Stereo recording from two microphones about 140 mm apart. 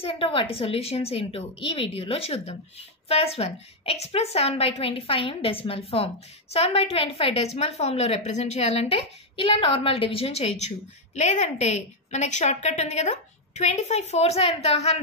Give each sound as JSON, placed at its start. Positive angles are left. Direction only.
{"t": 0.0, "sound": "a woman's voice", "side_deg": 40}